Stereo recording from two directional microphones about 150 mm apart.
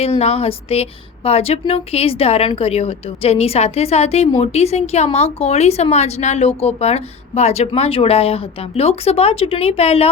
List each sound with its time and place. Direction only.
0.0 s a woman's voice: 45° left (ahead or behind)